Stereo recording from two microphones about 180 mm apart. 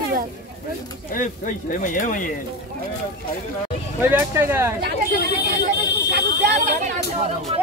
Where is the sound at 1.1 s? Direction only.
50° left (ahead or behind).